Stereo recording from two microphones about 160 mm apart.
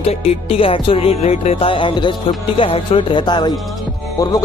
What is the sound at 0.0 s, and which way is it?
Music, 40° left (ahead or behind).